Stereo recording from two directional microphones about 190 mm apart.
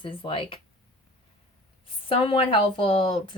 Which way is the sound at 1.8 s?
30° left (ahead or behind).